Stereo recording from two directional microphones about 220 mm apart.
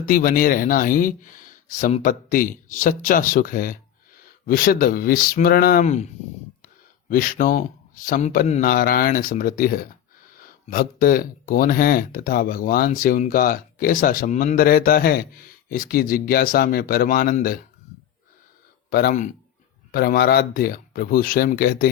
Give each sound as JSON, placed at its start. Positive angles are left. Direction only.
{"t": 0.0, "sound": "speech", "side_deg": 40}
{"t": 7.1, "sound": "speech", "side_deg": 40}
{"t": 18.9, "sound": "speech", "side_deg": 45}